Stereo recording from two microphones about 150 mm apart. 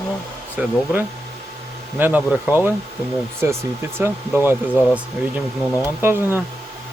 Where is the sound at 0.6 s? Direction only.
10° right (ahead or behind).